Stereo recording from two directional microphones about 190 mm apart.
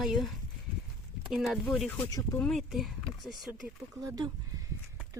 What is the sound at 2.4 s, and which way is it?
Speech, centre (ahead or behind).